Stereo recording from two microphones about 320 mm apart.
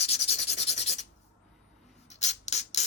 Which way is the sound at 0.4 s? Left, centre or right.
Centre.